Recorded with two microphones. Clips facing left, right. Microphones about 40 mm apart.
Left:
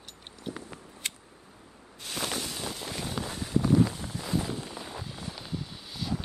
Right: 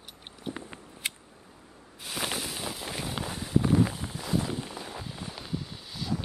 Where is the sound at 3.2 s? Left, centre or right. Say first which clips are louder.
Right 3 dB; centre.